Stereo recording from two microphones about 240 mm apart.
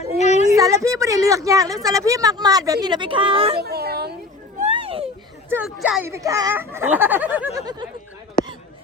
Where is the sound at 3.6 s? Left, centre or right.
Right.